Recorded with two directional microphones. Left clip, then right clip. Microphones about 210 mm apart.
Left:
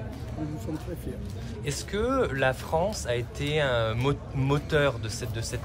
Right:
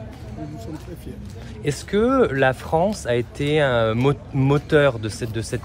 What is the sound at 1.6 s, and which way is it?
Speech, 35° right (ahead or behind).